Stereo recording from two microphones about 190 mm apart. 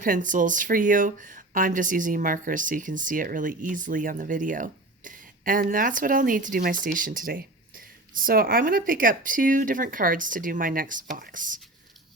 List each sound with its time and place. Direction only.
0.0 s speech: 45° right (ahead or behind)